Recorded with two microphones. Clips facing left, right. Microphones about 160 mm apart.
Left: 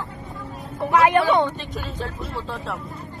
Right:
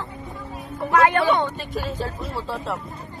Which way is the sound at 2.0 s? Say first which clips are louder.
Right 1 dB; centre (ahead or behind).